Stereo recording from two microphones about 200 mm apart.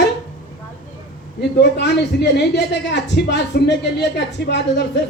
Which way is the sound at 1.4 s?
55° left (ahead or behind).